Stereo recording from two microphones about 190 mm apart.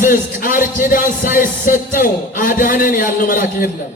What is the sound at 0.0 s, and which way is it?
A man's voice, 45° left (ahead or behind).